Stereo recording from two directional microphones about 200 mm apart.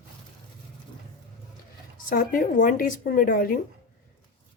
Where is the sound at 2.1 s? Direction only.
45° left (ahead or behind).